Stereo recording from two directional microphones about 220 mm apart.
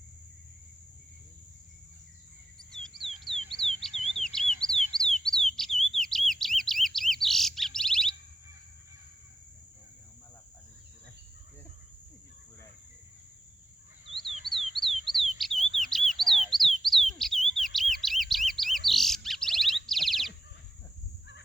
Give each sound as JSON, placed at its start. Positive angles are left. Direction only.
{"t": 2.6, "sound": "bird", "side_deg": 0}
{"t": 3.9, "sound": "bird", "side_deg": 30}
{"t": 4.2, "sound": "bird", "side_deg": 0}
{"t": 14.4, "sound": "bird", "side_deg": 0}